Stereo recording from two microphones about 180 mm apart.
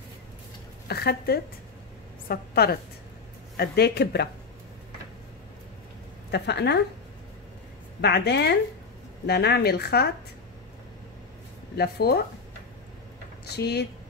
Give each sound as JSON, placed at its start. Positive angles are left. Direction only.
{"t": 0.8, "sound": "a woman's voice", "side_deg": 60}
{"t": 6.3, "sound": "a woman's voice", "side_deg": 70}
{"t": 8.0, "sound": "a woman's voice", "side_deg": 65}
{"t": 11.7, "sound": "speech", "side_deg": 60}
{"t": 13.6, "sound": "speech", "side_deg": 65}